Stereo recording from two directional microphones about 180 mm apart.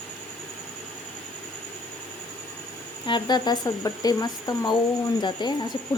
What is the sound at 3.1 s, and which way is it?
Speech, 25° left (ahead or behind).